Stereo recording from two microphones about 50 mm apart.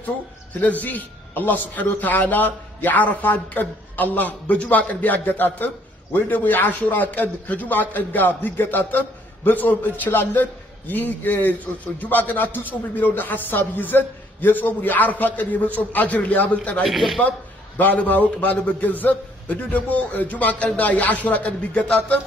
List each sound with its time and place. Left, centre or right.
0.6 s a man's voice: left
16.8 s speech: centre
17.7 s a man's voice: left